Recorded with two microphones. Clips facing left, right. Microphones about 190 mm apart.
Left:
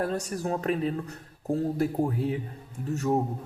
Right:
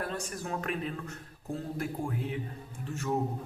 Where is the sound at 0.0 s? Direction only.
40° left (ahead or behind).